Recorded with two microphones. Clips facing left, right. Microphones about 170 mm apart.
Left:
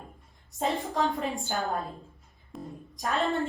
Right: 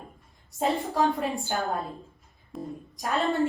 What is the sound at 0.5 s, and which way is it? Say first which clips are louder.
Speech: right 3 dB; centre (ahead or behind).